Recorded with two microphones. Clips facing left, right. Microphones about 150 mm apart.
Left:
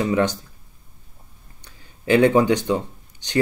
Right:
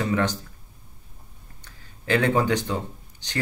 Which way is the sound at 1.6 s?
15° left (ahead or behind).